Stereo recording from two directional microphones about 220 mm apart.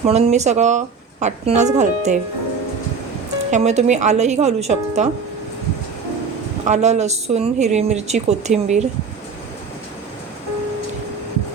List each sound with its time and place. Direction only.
0.0 s speech: 30° right (ahead or behind)
3.5 s speech: 30° right (ahead or behind)
6.7 s speech: 30° right (ahead or behind)